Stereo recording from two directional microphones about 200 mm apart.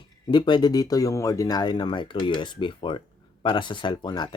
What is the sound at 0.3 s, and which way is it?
Speech, 20° left (ahead or behind).